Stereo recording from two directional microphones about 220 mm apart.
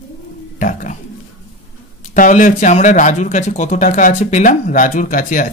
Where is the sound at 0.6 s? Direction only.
35° left (ahead or behind).